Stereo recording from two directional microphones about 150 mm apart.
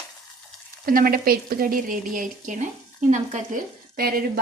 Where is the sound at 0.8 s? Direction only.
75° right (ahead or behind); by 3.6 s 50° right (ahead or behind).